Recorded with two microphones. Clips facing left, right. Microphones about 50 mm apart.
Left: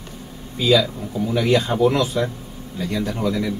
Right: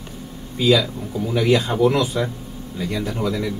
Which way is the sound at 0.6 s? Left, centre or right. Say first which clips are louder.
Even; centre.